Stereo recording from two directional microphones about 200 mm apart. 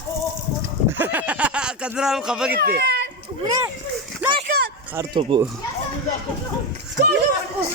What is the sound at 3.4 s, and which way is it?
Speech, 20° right (ahead or behind).